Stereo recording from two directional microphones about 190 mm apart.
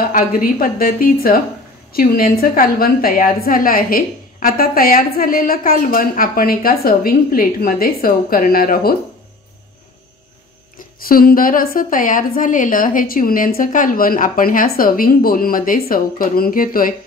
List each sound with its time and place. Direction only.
0.0 s a woman's voice: 50° left (ahead or behind)
11.1 s a woman's voice: 50° left (ahead or behind)